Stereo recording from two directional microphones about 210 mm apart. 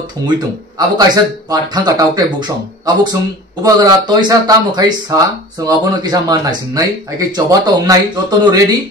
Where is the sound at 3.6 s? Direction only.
20° right (ahead or behind).